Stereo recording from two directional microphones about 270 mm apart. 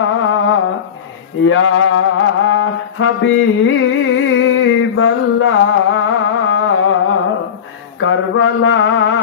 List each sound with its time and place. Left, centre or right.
0.0 s humming: left
1.4 s music: left
8.0 s mantra: left